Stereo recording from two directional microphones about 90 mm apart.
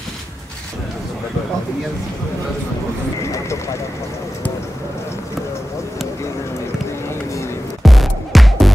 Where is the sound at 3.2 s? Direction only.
35° left (ahead or behind).